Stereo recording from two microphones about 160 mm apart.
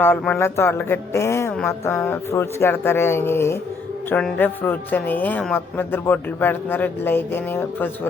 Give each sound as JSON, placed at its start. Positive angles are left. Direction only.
{"t": 0.0, "sound": "speech", "side_deg": 10}